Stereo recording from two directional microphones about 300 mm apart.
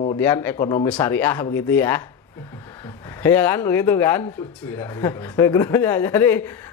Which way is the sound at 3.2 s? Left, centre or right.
Centre.